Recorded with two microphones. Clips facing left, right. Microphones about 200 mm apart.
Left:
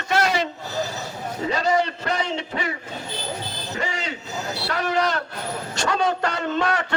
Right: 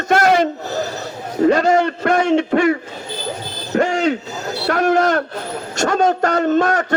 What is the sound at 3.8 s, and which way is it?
A man's voice, 50° right (ahead or behind).